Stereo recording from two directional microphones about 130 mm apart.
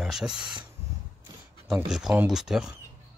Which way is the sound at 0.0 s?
5° right (ahead or behind).